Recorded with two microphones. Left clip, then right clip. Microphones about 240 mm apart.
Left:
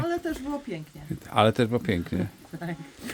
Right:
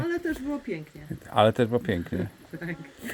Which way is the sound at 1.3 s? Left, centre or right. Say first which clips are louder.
Right 1 dB; centre.